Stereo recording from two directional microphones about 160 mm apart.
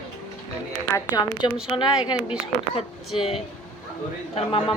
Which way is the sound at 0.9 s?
25° left (ahead or behind).